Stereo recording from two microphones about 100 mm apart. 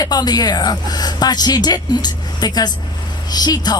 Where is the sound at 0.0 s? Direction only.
40° left (ahead or behind).